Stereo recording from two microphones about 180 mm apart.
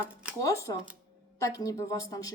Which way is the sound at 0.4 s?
15° left (ahead or behind).